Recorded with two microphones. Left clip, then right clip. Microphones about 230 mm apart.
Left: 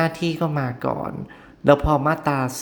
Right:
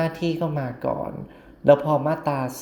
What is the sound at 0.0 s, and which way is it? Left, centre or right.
Speech, centre.